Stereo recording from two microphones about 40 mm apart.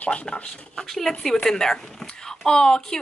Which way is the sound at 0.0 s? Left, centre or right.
Left.